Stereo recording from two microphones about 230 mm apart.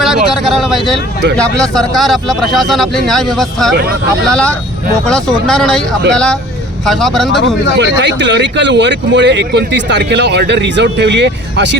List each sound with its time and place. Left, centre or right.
0.0 s a sound: centre
1.4 s speech: centre
6.8 s speech: centre
7.8 s speech: right